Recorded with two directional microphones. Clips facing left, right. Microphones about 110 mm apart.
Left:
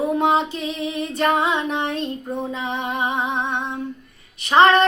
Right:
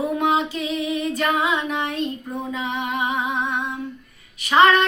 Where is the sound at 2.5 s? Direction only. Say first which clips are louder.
Even; 30° left (ahead or behind).